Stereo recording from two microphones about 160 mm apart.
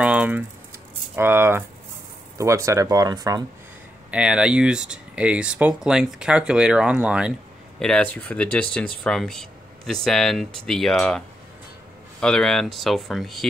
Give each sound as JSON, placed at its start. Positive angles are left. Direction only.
{"t": 0.0, "sound": "speech", "side_deg": -10}
{"t": 4.1, "sound": "speech", "side_deg": -5}
{"t": 7.8, "sound": "speech", "side_deg": 5}